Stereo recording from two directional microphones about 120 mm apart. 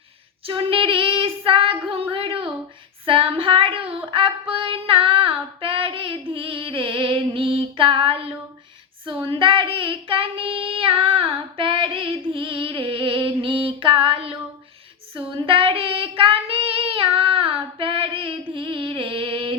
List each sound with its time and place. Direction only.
0.4 s child singing: 45° right (ahead or behind)
3.1 s female singing: 50° right (ahead or behind)
9.0 s child singing: 45° right (ahead or behind)